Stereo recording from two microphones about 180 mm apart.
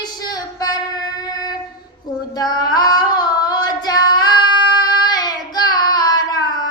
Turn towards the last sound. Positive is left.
turn(degrees=25)  # may be behind; listen again after turning